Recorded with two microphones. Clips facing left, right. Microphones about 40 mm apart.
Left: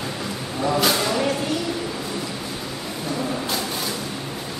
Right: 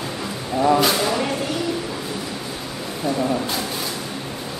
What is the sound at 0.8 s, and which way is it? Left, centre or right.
Speech, centre.